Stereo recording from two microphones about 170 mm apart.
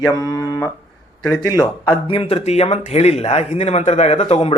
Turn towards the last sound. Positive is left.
turn(degrees=35)  # may be behind; listen again after turning